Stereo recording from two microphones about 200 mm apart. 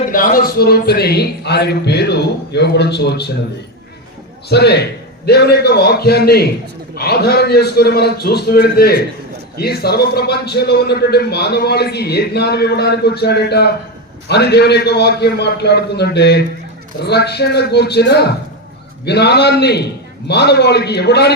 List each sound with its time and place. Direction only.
0.1 s speech: 45° left (ahead or behind)
4.4 s a man's voice: 55° left (ahead or behind)